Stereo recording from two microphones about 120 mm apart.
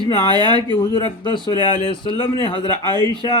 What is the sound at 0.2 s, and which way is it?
A man's voice, 40° left (ahead or behind).